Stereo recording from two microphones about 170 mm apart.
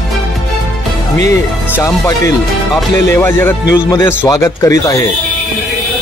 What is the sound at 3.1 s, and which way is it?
Speech, 15° left (ahead or behind).